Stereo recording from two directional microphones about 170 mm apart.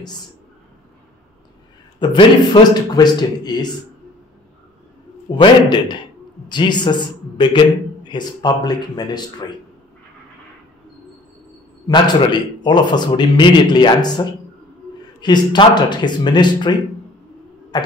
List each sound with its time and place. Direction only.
2.0 s a man's voice: 30° left (ahead or behind)
5.3 s a man's voice: 25° left (ahead or behind)
11.9 s a man's voice: 25° left (ahead or behind)